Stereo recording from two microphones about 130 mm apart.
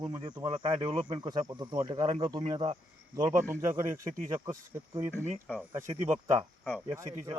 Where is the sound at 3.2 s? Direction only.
20° right (ahead or behind).